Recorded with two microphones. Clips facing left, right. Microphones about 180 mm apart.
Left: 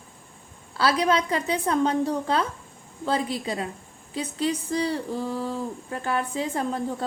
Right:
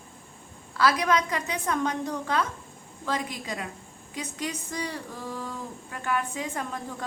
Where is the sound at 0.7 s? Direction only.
30° left (ahead or behind).